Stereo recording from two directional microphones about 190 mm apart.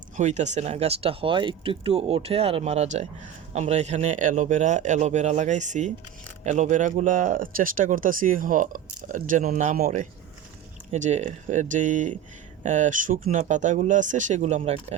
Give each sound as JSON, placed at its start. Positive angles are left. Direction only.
{"t": 0.2, "sound": "speech", "side_deg": -40}